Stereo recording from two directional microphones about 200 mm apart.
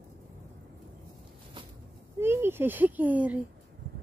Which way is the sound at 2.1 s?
10° right (ahead or behind).